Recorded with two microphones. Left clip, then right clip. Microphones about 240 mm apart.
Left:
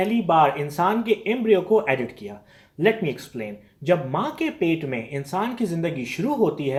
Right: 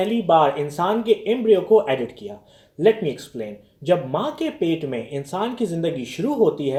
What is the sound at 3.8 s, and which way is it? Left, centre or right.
Speech, left.